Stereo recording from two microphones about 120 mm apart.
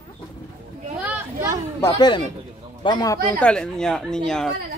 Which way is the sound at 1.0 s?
25° right (ahead or behind).